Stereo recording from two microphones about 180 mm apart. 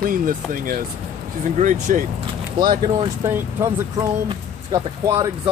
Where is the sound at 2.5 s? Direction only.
25° right (ahead or behind).